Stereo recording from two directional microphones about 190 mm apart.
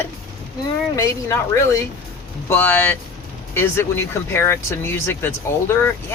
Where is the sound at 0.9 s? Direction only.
15° left (ahead or behind).